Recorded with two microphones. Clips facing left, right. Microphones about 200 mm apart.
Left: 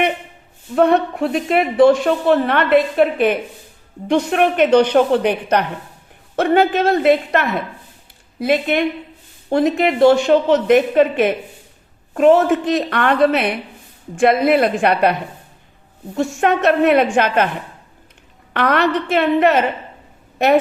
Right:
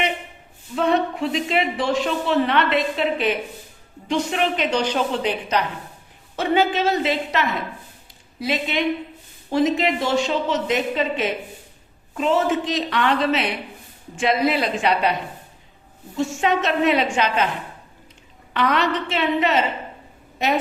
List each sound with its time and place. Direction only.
0.8 s a woman's voice: 55° left (ahead or behind)
16.1 s a woman's voice: 60° left (ahead or behind)
18.5 s a woman's voice: 60° left (ahead or behind)